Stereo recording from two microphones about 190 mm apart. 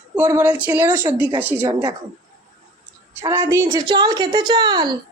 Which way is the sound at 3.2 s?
15° right (ahead or behind).